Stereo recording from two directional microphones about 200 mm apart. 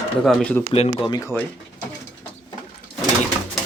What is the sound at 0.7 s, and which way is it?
Speech, 30° left (ahead or behind).